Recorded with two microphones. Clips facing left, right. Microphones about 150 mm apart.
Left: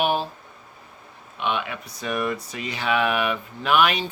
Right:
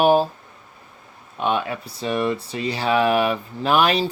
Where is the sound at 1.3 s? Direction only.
40° right (ahead or behind).